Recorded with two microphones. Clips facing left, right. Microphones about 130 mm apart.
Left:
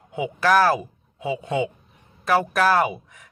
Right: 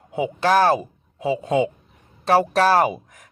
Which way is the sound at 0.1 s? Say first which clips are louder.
Right 1 dB; 30° right (ahead or behind).